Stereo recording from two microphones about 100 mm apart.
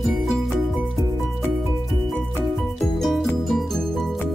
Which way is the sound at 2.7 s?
Centre (ahead or behind).